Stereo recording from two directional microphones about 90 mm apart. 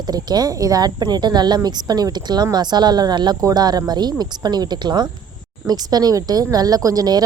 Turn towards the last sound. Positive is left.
turn(degrees=-45)  # may be behind; listen again after turning